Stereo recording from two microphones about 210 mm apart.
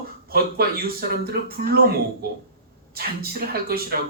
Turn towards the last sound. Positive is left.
turn(degrees=-45)  # may be behind; listen again after turning